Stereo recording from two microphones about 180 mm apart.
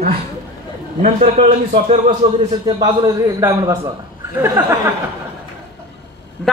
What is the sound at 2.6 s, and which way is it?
A man's voice, 20° right (ahead or behind).